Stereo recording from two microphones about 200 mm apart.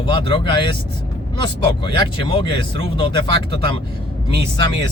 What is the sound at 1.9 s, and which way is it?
Speech, 25° left (ahead or behind).